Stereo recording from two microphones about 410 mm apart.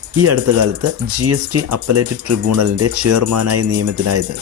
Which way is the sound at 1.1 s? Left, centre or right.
Right.